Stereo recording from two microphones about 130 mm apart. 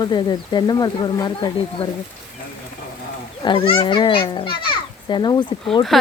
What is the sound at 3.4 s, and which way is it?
A child's voice, 40° left (ahead or behind).